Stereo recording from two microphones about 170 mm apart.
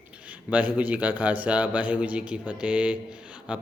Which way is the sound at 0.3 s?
10° right (ahead or behind).